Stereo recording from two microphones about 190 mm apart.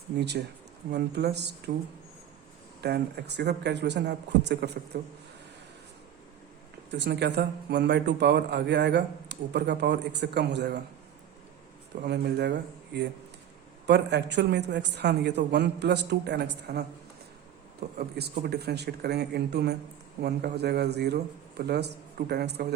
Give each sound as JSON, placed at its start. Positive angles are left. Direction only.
{"t": 0.2, "sound": "a man's voice", "side_deg": -60}
{"t": 2.8, "sound": "a man's voice", "side_deg": -60}
{"t": 6.9, "sound": "a man's voice", "side_deg": -65}
{"t": 12.0, "sound": "a man's voice", "side_deg": -60}
{"t": 17.9, "sound": "a man's voice", "side_deg": -55}